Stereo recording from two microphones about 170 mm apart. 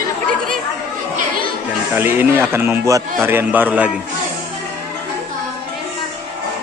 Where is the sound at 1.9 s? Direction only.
10° right (ahead or behind).